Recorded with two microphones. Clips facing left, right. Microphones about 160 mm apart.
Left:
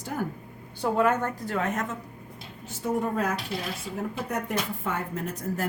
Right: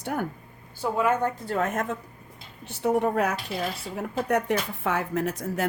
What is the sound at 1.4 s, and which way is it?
Speech, 45° right (ahead or behind).